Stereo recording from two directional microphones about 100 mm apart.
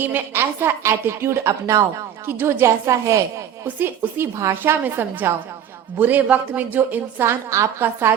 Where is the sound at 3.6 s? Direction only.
20° right (ahead or behind).